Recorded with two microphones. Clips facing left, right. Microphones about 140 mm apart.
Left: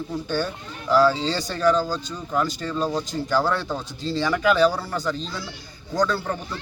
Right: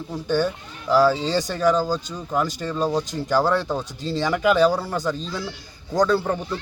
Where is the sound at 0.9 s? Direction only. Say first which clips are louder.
Right 1 dB; 10° right (ahead or behind).